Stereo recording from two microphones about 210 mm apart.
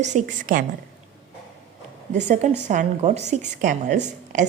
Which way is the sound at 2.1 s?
35° right (ahead or behind).